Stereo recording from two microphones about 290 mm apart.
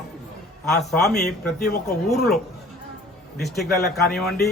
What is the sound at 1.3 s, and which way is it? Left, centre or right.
Speech, left.